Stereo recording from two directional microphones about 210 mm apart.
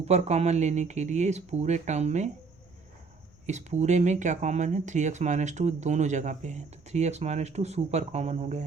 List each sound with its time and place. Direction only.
0.0 s speech: 30° right (ahead or behind)
3.4 s speech: 35° right (ahead or behind)